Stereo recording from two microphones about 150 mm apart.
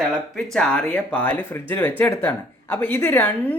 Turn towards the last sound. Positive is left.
turn(degrees=10)  # may be behind; listen again after turning